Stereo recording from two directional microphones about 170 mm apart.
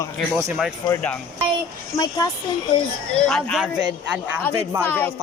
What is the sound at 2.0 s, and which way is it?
Speech, 20° left (ahead or behind).